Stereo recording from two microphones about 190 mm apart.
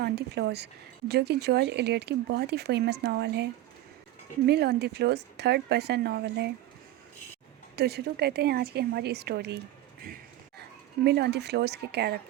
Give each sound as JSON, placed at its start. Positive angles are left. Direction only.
{"t": 0.0, "sound": "speech", "side_deg": -60}
{"t": 7.8, "sound": "speech", "side_deg": -60}
{"t": 11.0, "sound": "speech", "side_deg": -60}